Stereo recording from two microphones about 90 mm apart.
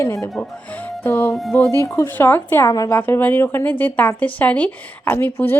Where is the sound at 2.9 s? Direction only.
20° left (ahead or behind).